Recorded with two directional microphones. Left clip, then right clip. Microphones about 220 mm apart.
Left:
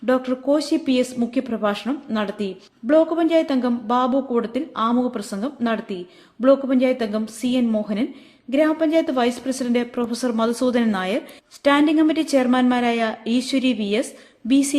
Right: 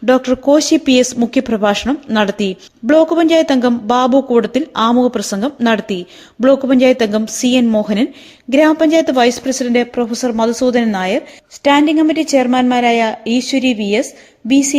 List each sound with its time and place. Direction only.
0.0 s a woman's voice: 30° right (ahead or behind)